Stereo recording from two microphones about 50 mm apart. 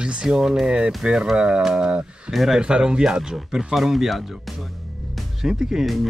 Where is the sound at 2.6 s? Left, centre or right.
Centre.